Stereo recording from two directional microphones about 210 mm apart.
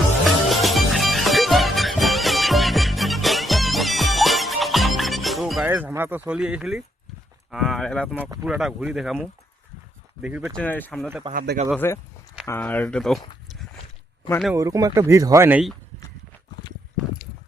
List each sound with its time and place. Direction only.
0.3 s music: centre (ahead or behind)
7.5 s speech: centre (ahead or behind)
8.2 s speech: 15° right (ahead or behind)
8.4 s speech: 5° right (ahead or behind)
11.3 s speech: 45° right (ahead or behind)
11.8 s speech: 10° left (ahead or behind)
14.5 s speech: 15° right (ahead or behind)